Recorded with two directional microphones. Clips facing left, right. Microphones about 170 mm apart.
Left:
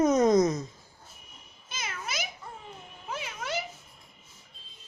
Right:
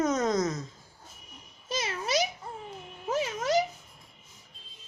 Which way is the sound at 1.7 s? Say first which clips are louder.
Right 8 dB; 35° right (ahead or behind).